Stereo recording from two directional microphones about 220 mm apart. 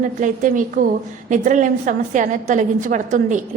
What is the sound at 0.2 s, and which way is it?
A woman's voice, 35° right (ahead or behind).